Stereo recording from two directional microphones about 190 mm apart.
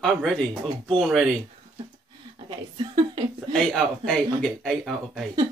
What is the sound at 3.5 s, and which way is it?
Speech, centre (ahead or behind).